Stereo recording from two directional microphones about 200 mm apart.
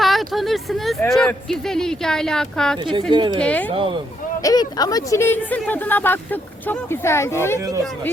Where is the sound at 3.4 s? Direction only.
5° left (ahead or behind).